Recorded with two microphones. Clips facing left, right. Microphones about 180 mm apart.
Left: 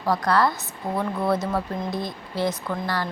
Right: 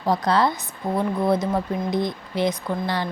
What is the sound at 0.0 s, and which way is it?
Speech, 20° right (ahead or behind).